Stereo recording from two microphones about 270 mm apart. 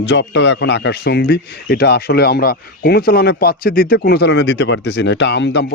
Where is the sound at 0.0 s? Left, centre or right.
Left.